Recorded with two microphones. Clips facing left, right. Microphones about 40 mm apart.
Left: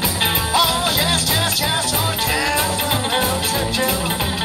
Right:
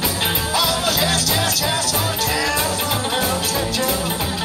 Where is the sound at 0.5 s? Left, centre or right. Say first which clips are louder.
Left 2 dB; centre.